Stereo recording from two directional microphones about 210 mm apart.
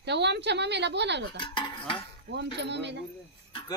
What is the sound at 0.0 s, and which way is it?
Speech, 55° right (ahead or behind).